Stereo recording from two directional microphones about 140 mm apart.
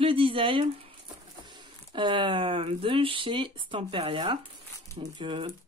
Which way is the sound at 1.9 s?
35° right (ahead or behind).